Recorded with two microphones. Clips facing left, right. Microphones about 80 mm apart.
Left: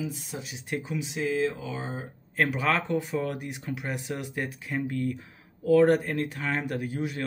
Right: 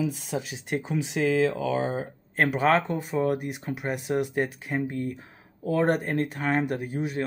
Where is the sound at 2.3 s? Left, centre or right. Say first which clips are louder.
Right 4 dB; right.